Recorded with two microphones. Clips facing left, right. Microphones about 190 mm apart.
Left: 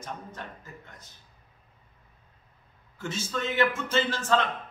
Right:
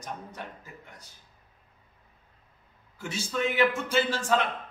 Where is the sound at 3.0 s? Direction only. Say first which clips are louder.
Right 2 dB; 15° right (ahead or behind).